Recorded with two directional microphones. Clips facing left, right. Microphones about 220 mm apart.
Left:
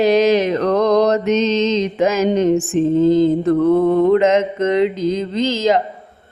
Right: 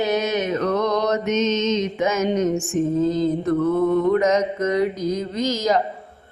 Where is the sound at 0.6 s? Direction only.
35° left (ahead or behind).